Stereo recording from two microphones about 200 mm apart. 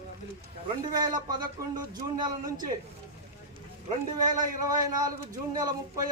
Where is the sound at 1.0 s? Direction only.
20° right (ahead or behind).